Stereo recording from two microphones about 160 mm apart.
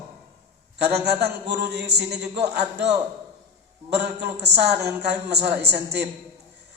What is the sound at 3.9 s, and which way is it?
A woman's voice, 90° right.